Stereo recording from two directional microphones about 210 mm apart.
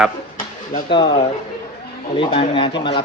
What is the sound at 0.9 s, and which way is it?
Speech, 20° left (ahead or behind).